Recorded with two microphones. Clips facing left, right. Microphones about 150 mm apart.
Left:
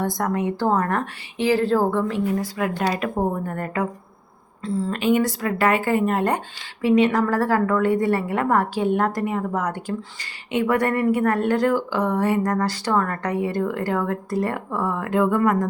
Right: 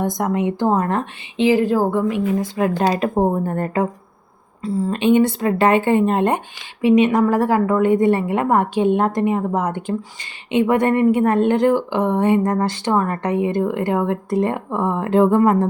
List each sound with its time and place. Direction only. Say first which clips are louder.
0.0 s a woman's voice: right 3 dB; 20° right (ahead or behind)
2.9 s speech: right 5 dB; 30° right (ahead or behind)
4.9 s a woman's voice: right 5 dB; 25° right (ahead or behind)